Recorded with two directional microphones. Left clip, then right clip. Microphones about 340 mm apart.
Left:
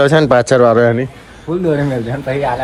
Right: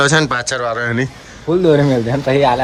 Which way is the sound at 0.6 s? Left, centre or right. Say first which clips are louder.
Left 10 dB; left.